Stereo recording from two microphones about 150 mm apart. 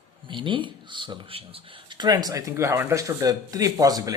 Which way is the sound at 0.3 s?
35° right (ahead or behind).